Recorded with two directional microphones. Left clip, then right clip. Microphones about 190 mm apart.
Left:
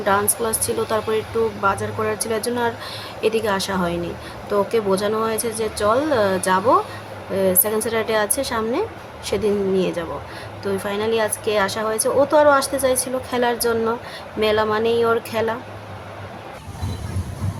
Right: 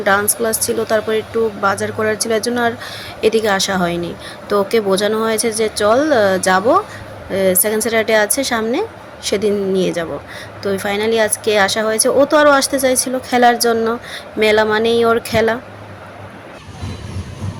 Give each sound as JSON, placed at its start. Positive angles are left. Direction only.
{"t": 0.0, "sound": "a woman's voice", "side_deg": -15}